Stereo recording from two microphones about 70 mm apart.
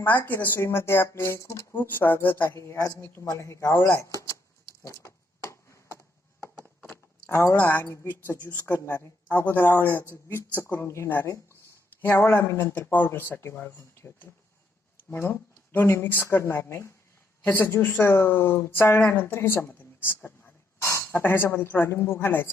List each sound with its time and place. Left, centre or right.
0.0 s speech: left
1.7 s speech: left
2.6 s speech: left
5.0 s a sound: left
6.9 s a sound: left
8.5 s a man's voice: left
10.6 s a man's voice: left
15.1 s speech: left
17.4 s a woman's voice: left